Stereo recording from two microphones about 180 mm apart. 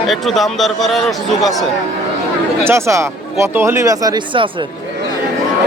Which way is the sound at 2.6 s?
15° right (ahead or behind).